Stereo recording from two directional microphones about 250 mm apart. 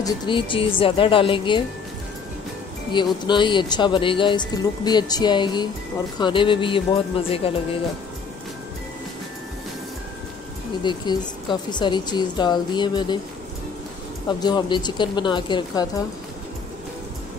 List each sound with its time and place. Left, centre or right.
0.0 s speech: centre
2.9 s speech: centre
10.8 s speech: centre
14.4 s speech: centre